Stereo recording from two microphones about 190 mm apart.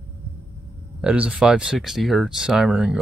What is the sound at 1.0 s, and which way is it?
Speech, 5° right (ahead or behind).